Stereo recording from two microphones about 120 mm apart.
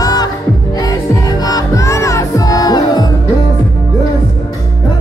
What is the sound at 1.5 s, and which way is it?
Music, 25° left (ahead or behind).